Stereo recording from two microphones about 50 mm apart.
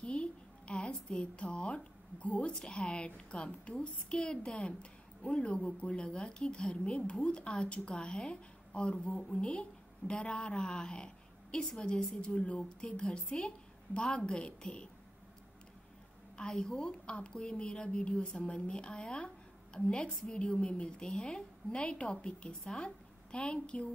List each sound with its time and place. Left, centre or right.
0.0 s a sound: left
2.5 s a woman's voice: centre
12.2 s speech: left
16.3 s a woman's voice: centre